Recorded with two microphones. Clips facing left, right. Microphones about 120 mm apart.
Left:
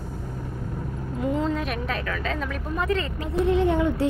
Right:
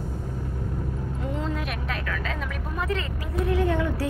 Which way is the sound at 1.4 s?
5° right (ahead or behind).